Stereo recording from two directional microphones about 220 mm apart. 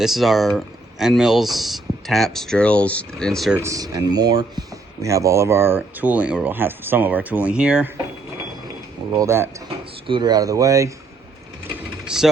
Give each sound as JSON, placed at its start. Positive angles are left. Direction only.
{"t": 0.0, "sound": "speech", "side_deg": 0}
{"t": 3.6, "sound": "speech", "side_deg": -15}
{"t": 9.1, "sound": "speech", "side_deg": -10}
{"t": 12.0, "sound": "speech", "side_deg": 0}